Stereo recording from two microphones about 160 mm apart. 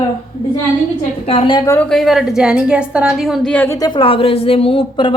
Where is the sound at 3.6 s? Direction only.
20° left (ahead or behind).